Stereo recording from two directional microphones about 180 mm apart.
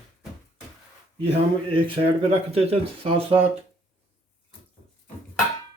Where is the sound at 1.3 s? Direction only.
35° right (ahead or behind).